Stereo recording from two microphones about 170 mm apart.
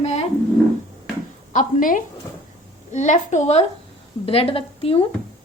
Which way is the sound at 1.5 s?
50° left (ahead or behind).